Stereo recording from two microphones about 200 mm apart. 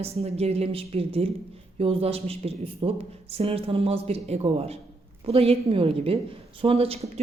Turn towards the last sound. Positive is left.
turn(degrees=-30)  # may be behind; listen again after turning